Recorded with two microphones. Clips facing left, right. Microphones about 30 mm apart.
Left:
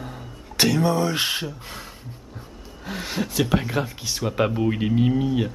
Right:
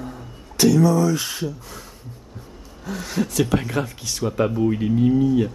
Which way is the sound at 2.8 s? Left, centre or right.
Left.